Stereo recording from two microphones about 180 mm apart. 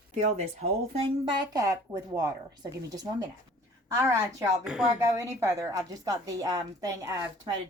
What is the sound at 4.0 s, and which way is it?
A woman's voice, 15° right (ahead or behind).